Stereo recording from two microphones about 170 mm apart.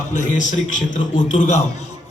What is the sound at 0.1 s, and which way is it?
A man's voice, 45° left (ahead or behind).